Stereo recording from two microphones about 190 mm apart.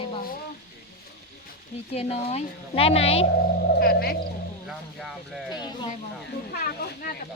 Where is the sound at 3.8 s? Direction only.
55° left (ahead or behind).